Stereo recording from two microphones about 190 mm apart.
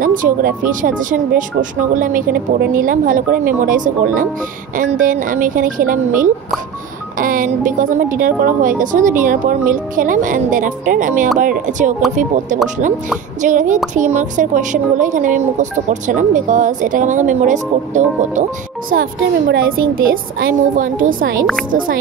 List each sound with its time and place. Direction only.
0.0 s speech: 45° right (ahead or behind)
13.4 s speech: 40° right (ahead or behind)
19.5 s speech: 50° right (ahead or behind)